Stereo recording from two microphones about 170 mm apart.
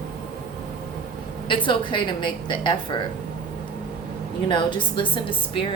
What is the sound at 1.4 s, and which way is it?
A woman's voice, 30° left (ahead or behind).